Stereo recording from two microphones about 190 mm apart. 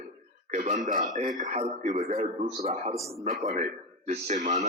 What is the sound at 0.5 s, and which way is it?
A man's voice, 40° right (ahead or behind).